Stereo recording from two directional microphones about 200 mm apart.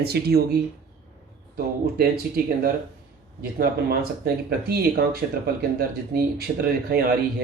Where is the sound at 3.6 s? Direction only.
50° right (ahead or behind).